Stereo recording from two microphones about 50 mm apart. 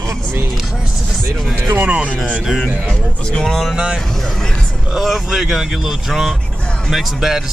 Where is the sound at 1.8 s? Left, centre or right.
Right.